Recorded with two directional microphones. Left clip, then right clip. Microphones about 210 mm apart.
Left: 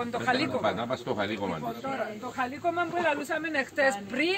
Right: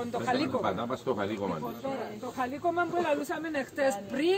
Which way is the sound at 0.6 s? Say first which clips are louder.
Left 2 dB; 35° left (ahead or behind).